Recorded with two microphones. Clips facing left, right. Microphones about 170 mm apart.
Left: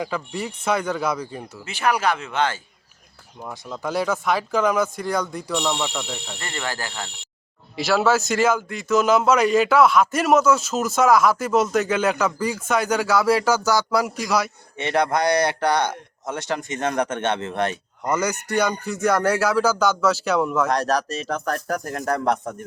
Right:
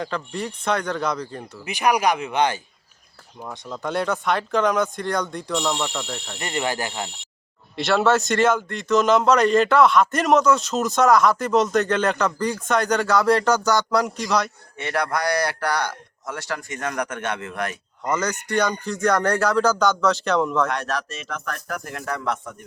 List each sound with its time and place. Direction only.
0.0 s speech: 5° left (ahead or behind)
1.6 s speech: 15° right (ahead or behind)
3.4 s a man's voice: 5° left (ahead or behind)
6.4 s speech: 20° right (ahead or behind)
7.8 s a man's voice: centre (ahead or behind)
14.8 s speech: 20° left (ahead or behind)
18.0 s speech: 10° left (ahead or behind)
20.7 s speech: 35° left (ahead or behind)